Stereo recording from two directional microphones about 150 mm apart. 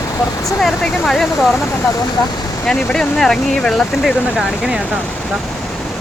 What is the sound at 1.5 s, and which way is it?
Speech, 20° left (ahead or behind).